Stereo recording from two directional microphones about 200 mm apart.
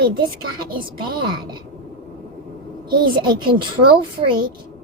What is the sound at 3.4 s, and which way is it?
A woman's voice, 25° right (ahead or behind).